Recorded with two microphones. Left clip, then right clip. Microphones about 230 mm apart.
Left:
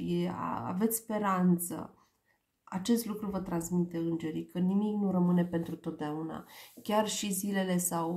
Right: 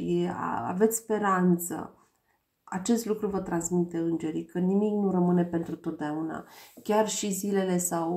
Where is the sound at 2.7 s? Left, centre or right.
Left.